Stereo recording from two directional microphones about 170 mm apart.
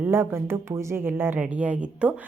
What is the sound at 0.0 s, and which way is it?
Speech, 15° right (ahead or behind).